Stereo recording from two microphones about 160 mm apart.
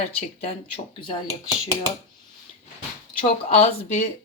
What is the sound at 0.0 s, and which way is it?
Speech, 40° left (ahead or behind).